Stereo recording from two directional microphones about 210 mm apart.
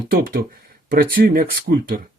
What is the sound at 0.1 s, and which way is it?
Speech, 45° right (ahead or behind).